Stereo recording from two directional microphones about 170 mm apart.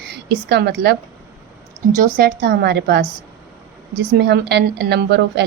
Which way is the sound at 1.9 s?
55° right (ahead or behind).